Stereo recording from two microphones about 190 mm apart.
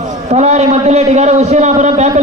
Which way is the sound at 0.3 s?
35° right (ahead or behind).